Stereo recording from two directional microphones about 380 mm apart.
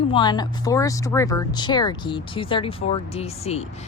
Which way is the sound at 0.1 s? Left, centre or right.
Centre.